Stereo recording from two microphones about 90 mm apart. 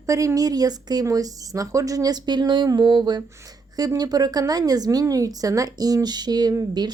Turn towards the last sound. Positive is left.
turn(degrees=-50)  # may be behind; listen again after turning